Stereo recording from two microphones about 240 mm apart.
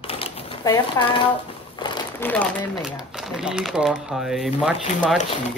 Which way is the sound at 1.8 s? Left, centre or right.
Centre.